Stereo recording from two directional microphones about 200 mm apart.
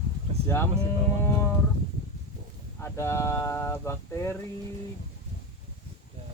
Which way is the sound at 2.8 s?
15° left (ahead or behind).